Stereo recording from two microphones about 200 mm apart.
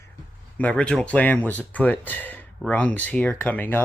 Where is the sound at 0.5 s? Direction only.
5° left (ahead or behind).